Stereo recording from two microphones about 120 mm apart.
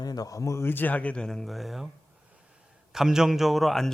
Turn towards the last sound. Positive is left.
turn(degrees=0)  # may be behind; listen again after turning